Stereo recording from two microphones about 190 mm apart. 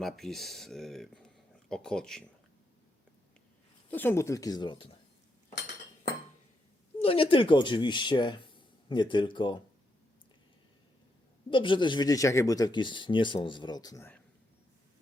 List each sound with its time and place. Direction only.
0.0 s speech: centre (ahead or behind)
3.9 s speech: 10° left (ahead or behind)
7.0 s speech: 30° left (ahead or behind)
11.5 s speech: 25° left (ahead or behind)